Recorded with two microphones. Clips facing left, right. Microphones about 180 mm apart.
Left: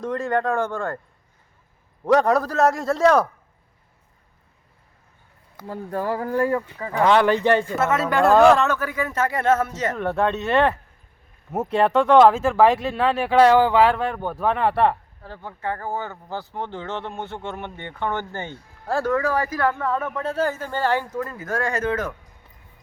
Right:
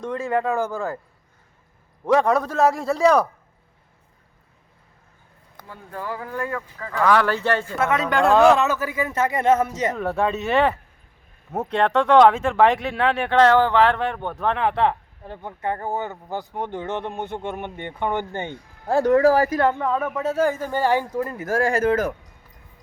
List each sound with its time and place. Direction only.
0.0 s speech: centre (ahead or behind)
2.1 s speech: centre (ahead or behind)
5.6 s speech: 40° left (ahead or behind)
6.7 s speech: 20° left (ahead or behind)
7.8 s speech: 5° left (ahead or behind); by 10.0 s 10° right (ahead or behind)
10.0 s speech: centre (ahead or behind)
15.2 s speech: 20° right (ahead or behind)
19.1 s speech: 35° right (ahead or behind); by 21.2 s 10° right (ahead or behind)
21.2 s speech: 25° right (ahead or behind)